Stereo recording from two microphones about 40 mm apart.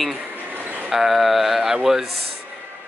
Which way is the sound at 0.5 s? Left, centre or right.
Right.